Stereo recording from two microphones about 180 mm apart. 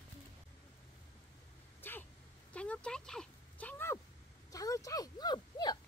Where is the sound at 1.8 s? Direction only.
10° left (ahead or behind).